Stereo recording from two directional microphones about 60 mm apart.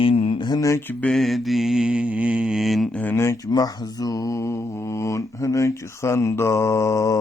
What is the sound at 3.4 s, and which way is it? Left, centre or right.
Mantra, left.